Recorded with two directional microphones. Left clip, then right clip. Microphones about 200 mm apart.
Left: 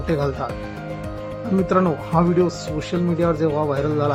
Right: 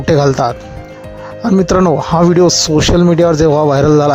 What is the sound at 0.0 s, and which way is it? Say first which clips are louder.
Speech: right 12 dB; 40° right (ahead or behind).